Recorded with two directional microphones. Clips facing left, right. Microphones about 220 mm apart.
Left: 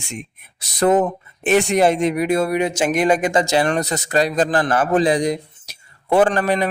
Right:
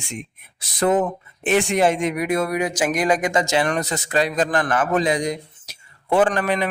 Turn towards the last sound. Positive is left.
turn(degrees=40)  # may be behind; listen again after turning